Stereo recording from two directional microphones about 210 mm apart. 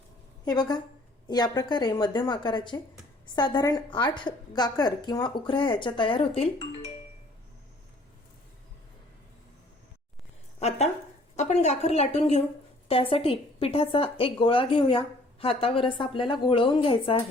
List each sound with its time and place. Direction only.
0.4 s speech: 20° left (ahead or behind)
10.6 s a sound: 30° left (ahead or behind)
11.3 s a woman's voice: 35° left (ahead or behind)